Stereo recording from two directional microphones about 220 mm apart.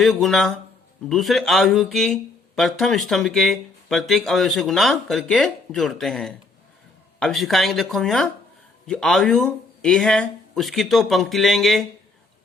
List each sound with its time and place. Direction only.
0.0 s speech: centre (ahead or behind)